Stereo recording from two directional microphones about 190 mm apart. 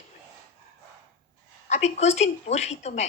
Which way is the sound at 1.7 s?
35° left (ahead or behind).